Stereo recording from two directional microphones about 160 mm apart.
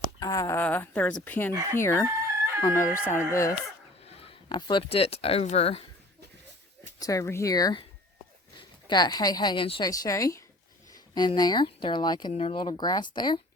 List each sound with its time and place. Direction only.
0.2 s speech: 20° left (ahead or behind)
4.0 s speech: 35° left (ahead or behind)
7.0 s speech: 20° left (ahead or behind)
9.9 s speech: 20° left (ahead or behind)